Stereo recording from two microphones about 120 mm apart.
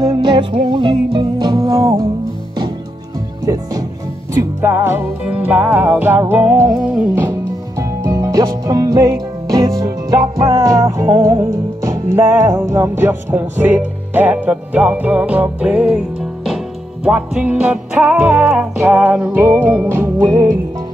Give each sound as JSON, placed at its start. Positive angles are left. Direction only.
{"t": 0.0, "sound": "music", "side_deg": -35}
{"t": 3.5, "sound": "music", "side_deg": -25}
{"t": 5.2, "sound": "music", "side_deg": -10}
{"t": 6.7, "sound": "music", "side_deg": -5}
{"t": 7.2, "sound": "music", "side_deg": -25}